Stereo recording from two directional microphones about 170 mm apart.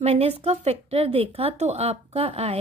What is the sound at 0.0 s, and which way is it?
Speech, 40° right (ahead or behind).